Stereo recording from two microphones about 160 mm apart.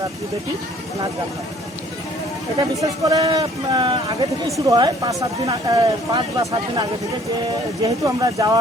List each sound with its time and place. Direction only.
2.8 s speech: 20° right (ahead or behind)